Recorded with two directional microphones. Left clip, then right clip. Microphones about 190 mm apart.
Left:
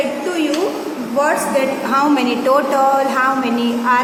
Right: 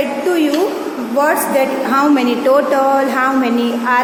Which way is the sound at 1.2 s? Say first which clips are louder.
Right 2 dB; 25° right (ahead or behind).